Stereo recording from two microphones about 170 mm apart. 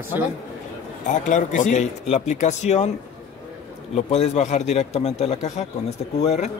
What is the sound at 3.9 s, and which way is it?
Speech, 40° left (ahead or behind).